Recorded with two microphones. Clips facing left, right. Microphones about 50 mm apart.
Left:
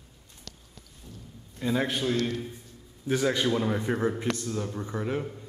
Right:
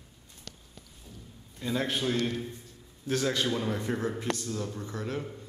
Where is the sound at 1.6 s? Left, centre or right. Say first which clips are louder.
Left 4 dB; centre.